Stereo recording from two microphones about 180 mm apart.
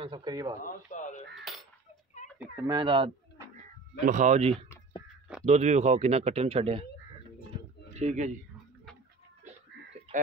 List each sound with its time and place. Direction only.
0.0 s speech: 25° right (ahead or behind)
0.7 s a sound: 45° left (ahead or behind)
1.4 s cutlery: centre (ahead or behind)
2.2 s fowl: 40° left (ahead or behind)
2.6 s speech: 25° right (ahead or behind)
4.0 s speech: 45° right (ahead or behind)
7.9 s speech: 40° right (ahead or behind)